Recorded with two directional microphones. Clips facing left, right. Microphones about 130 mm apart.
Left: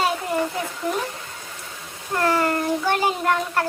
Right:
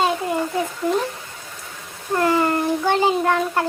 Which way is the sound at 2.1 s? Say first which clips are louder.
Right 2 dB; 15° right (ahead or behind).